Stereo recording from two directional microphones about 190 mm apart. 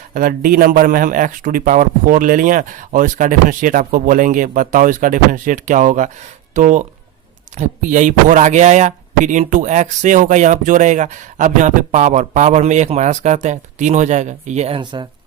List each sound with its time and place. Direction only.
0.1 s a man's voice: 50° right (ahead or behind)